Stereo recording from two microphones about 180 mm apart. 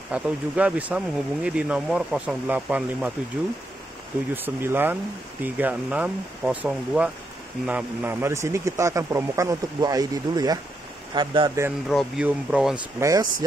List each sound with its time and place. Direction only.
0.1 s a man's voice: 5° right (ahead or behind)
4.3 s a man's voice: 10° right (ahead or behind)
11.9 s speech: centre (ahead or behind)
12.7 s speech: 20° right (ahead or behind)